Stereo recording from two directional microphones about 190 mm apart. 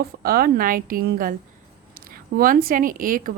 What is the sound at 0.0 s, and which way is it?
A woman's voice, 50° right (ahead or behind).